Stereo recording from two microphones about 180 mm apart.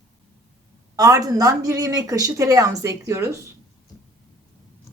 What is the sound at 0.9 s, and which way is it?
Speech, 20° right (ahead or behind).